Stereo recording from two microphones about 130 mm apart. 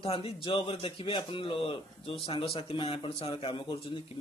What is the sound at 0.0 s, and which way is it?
Speech, 45° left (ahead or behind).